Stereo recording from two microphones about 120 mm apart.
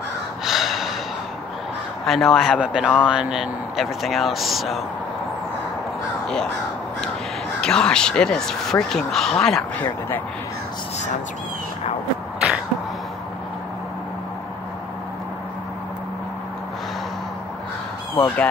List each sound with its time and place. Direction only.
0.5 s gasp: centre (ahead or behind)
2.0 s speech: centre (ahead or behind)
6.2 s crow: 5° left (ahead or behind)
7.6 s speech: 5° left (ahead or behind)
18.1 s speech: 15° left (ahead or behind)